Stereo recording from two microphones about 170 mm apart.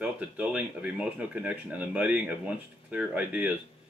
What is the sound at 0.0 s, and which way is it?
Speech, 5° right (ahead or behind).